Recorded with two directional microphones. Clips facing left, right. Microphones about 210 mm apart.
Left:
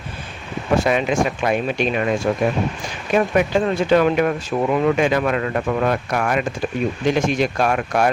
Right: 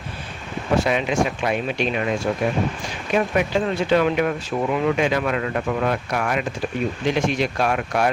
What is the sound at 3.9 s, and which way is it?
Speech, 45° left (ahead or behind).